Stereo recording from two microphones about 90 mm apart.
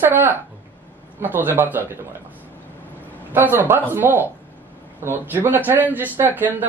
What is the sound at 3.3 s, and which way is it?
A man's voice, 25° right (ahead or behind).